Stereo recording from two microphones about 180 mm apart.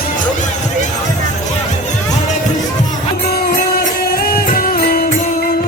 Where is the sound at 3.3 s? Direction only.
55° left (ahead or behind).